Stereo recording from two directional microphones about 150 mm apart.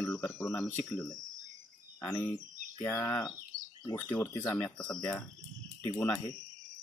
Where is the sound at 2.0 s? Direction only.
15° left (ahead or behind).